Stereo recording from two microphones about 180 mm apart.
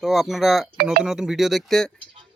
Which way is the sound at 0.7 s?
60° right (ahead or behind).